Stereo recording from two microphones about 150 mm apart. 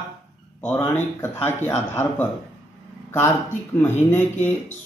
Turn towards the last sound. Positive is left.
turn(degrees=15)  # may be behind; listen again after turning